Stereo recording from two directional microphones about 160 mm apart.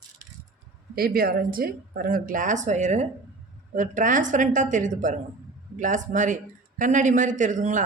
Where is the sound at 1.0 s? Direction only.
70° right (ahead or behind).